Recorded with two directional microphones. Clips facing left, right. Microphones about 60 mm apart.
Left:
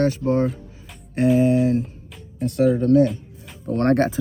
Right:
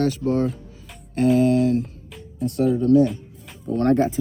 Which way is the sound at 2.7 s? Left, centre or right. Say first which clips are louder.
Right 3 dB; left.